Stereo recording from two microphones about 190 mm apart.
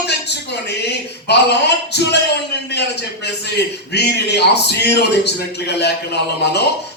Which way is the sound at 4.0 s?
60° left (ahead or behind).